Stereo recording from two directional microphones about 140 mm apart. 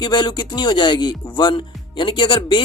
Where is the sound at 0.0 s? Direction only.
35° left (ahead or behind).